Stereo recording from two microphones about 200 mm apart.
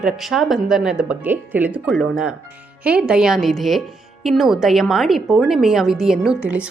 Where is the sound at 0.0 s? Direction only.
Centre (ahead or behind).